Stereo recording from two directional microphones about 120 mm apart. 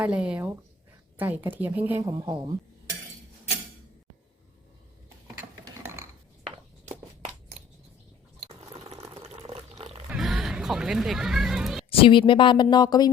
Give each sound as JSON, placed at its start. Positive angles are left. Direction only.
{"t": 0.0, "sound": "a woman's voice", "side_deg": -10}
{"t": 5.3, "sound": "mechanisms", "side_deg": -35}
{"t": 8.4, "sound": "a sound", "side_deg": -55}
{"t": 9.1, "sound": "water", "side_deg": -55}
{"t": 10.1, "sound": "music", "side_deg": 0}
{"t": 11.9, "sound": "speech", "side_deg": 45}